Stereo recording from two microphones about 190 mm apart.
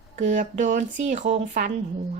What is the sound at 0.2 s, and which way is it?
Speech, 40° right (ahead or behind).